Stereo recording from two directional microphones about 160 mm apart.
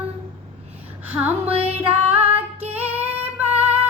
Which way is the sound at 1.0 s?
10° right (ahead or behind).